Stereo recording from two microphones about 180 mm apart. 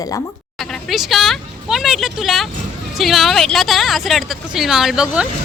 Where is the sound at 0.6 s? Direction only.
Centre (ahead or behind).